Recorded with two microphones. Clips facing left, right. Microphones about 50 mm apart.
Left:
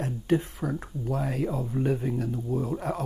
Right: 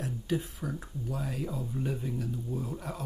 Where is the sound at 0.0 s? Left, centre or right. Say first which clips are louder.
Left 7 dB; left.